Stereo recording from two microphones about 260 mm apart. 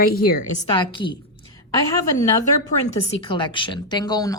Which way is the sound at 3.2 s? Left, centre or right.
Centre.